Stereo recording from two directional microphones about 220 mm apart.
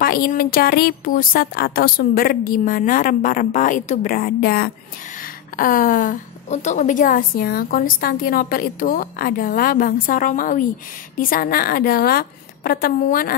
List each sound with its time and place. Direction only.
0.0 s a woman's voice: 40° left (ahead or behind)